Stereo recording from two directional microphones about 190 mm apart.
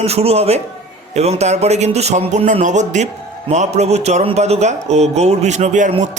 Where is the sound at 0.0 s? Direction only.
35° right (ahead or behind).